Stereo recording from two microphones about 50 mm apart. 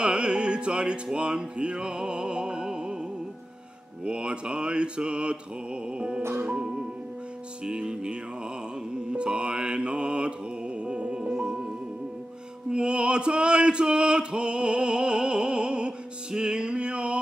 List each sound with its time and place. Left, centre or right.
0.0 s music: centre
4.0 s music: centre
9.1 s mantra: centre
10.8 s music: centre
12.7 s male singing: centre